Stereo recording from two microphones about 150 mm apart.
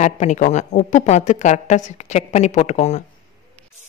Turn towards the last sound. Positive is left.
turn(degrees=50)  # may be behind; listen again after turning